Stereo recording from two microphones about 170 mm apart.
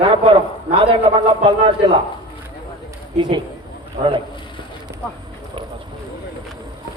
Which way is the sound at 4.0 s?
55° right (ahead or behind).